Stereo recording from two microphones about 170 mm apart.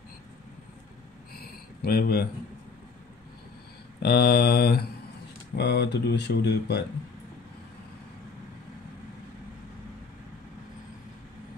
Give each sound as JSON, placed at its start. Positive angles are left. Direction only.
{"t": 1.4, "sound": "a sound", "side_deg": 65}
{"t": 4.0, "sound": "speech", "side_deg": 70}
{"t": 5.6, "sound": "speech", "side_deg": 80}